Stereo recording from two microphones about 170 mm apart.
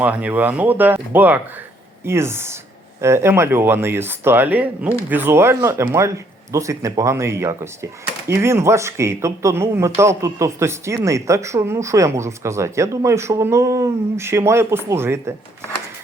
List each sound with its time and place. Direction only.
0.0 s a man's voice: 10° right (ahead or behind)